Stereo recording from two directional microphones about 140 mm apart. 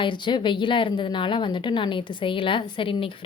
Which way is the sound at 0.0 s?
35° left (ahead or behind).